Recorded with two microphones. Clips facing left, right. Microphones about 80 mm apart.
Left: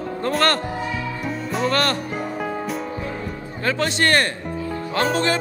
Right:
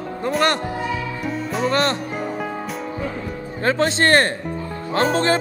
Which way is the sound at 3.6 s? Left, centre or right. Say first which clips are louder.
Right 3 dB; right.